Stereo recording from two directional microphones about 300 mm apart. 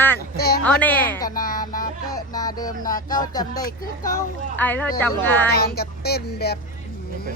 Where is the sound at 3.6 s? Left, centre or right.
Left.